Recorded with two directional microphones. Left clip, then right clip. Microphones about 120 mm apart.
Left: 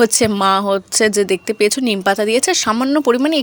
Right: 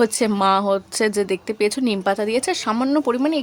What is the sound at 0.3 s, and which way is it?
Speech, 20° left (ahead or behind).